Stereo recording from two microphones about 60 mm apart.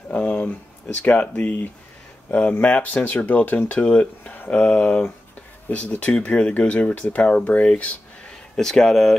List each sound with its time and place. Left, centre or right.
0.1 s a sound: left
1.0 s speech: left
8.5 s speech: centre